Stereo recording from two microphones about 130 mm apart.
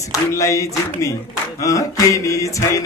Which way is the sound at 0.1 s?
25° left (ahead or behind).